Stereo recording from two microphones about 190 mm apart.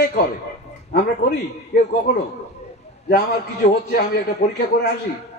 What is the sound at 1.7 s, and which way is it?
Speech, 60° left (ahead or behind).